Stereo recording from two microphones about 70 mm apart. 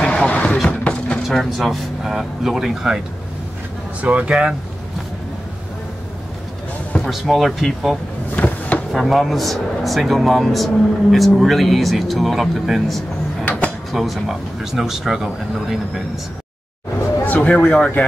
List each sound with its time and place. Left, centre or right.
0.0 s a sound: centre
1.3 s a man's voice: centre
4.0 s speech: centre
7.0 s a man's voice: centre
8.4 s drawer open or close: left
8.9 s a man's voice: centre
17.2 s speech: left